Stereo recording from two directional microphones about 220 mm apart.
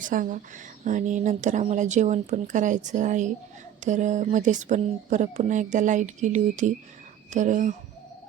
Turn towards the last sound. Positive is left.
turn(degrees=-35)  # may be behind; listen again after turning